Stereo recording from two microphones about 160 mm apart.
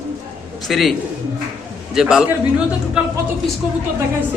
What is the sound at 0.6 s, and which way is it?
Speech, centre (ahead or behind).